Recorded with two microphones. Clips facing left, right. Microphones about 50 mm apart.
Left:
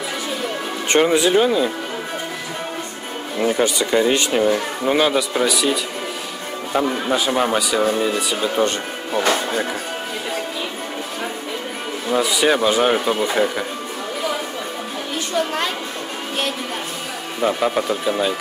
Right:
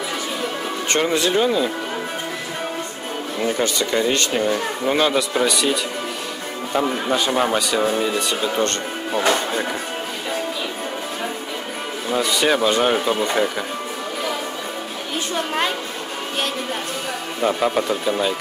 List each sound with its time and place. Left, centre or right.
0.8 s speech: centre
3.3 s speech: centre
12.1 s speech: centre
17.4 s speech: centre